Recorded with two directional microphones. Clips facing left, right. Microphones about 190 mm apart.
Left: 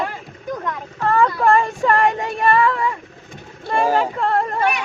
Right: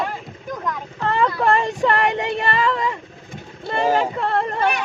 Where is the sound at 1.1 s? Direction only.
20° right (ahead or behind).